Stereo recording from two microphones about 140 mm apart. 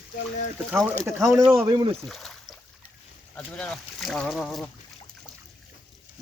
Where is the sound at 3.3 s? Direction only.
5° left (ahead or behind).